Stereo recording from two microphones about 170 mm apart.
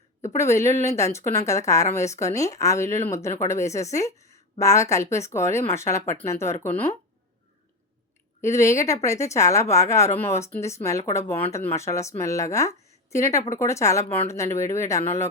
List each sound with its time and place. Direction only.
0.3 s speech: 15° left (ahead or behind)
8.4 s speech: 15° left (ahead or behind)